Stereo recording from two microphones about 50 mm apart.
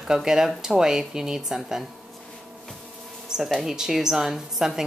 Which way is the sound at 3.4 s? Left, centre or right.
Centre.